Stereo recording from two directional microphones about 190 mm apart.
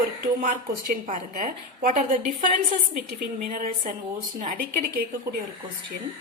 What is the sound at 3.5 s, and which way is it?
Speech, 45° right (ahead or behind).